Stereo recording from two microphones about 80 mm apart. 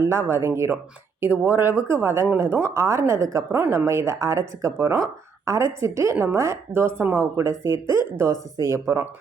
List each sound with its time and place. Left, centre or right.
0.0 s speech: right
6.1 s speech: right